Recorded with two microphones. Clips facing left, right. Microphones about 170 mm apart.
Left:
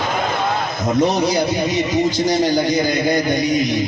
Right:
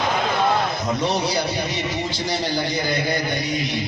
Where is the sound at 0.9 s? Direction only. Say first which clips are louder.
Left 8 dB; 45° left (ahead or behind).